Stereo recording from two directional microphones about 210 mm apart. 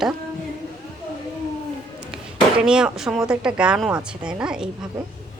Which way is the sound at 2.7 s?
5° right (ahead or behind).